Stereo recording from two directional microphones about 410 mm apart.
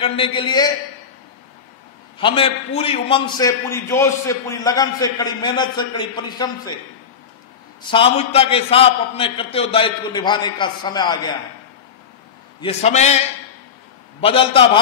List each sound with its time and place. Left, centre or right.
0.0 s a man's voice: centre
2.1 s a man's voice: centre
7.8 s a man's voice: centre
12.5 s a man's voice: centre
14.2 s a man's voice: centre